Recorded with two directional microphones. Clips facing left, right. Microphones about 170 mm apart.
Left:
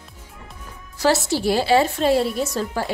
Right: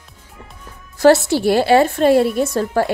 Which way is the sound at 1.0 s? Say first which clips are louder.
Right 8 dB; 60° right (ahead or behind).